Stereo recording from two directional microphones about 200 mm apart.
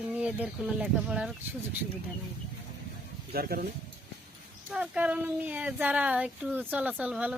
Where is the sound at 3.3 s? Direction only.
50° right (ahead or behind).